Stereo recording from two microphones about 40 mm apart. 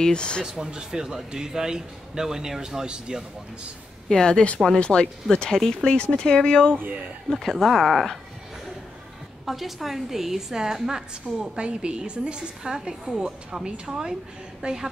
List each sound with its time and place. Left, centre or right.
0.0 s speech: left
0.7 s a woman's voice: centre
4.1 s speech: left
5.6 s speech: centre
6.7 s a man's voice: right
7.2 s speech: centre
9.5 s a woman's voice: centre